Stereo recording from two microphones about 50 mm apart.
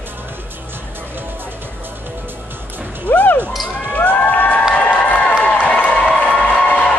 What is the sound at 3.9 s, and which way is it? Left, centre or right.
Crowd, left.